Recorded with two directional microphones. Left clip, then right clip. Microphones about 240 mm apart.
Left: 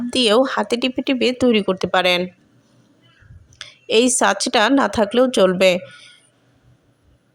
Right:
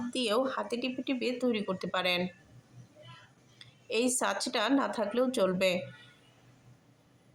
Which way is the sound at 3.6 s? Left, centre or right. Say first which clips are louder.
Left 15 dB; left.